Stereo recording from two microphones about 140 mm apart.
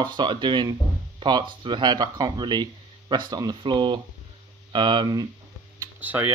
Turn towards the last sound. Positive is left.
turn(degrees=-10)  # may be behind; listen again after turning